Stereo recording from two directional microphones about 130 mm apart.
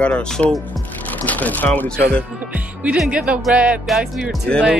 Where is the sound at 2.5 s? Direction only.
10° right (ahead or behind).